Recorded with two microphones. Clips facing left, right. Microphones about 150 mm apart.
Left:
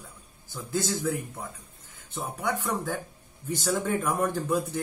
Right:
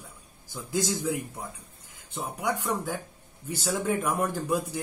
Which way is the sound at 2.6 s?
10° right (ahead or behind).